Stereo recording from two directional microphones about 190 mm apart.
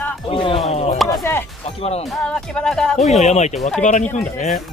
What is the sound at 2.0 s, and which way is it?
Speech, centre (ahead or behind).